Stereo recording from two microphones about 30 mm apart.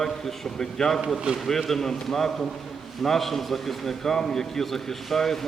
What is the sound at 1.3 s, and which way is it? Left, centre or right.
Speech, right.